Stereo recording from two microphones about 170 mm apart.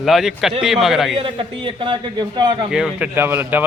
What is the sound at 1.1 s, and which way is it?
A man's voice, 30° right (ahead or behind).